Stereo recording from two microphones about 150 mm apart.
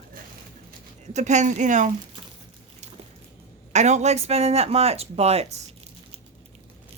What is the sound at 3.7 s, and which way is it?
A woman's voice, 50° right (ahead or behind).